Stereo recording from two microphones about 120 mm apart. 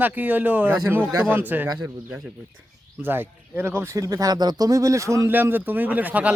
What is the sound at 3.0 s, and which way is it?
Speech, 20° right (ahead or behind).